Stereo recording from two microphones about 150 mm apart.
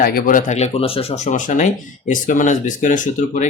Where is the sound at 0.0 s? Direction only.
70° left (ahead or behind).